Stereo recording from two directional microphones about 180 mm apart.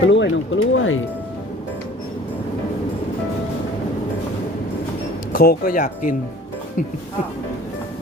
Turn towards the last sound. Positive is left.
turn(degrees=45)  # may be behind; listen again after turning